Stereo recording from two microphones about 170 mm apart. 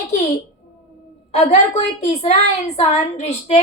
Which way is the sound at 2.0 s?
40° left (ahead or behind).